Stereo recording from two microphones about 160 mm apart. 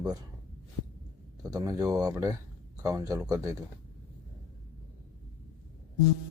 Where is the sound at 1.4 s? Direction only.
20° right (ahead or behind).